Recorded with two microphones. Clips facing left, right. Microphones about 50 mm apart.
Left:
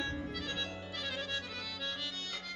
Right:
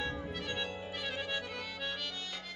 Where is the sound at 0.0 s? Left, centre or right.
Right.